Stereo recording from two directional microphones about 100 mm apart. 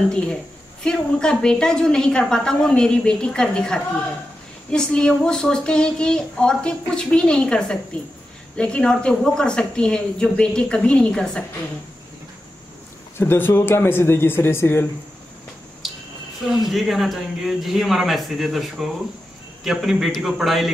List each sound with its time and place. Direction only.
0.8 s speech: 5° left (ahead or behind)
13.2 s speech: 25° left (ahead or behind)
15.8 s a sound: centre (ahead or behind)
16.4 s speech: 5° right (ahead or behind)